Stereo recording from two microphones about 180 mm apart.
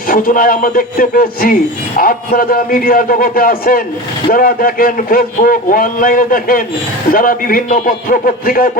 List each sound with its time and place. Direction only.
0.1 s a man's voice: 50° left (ahead or behind)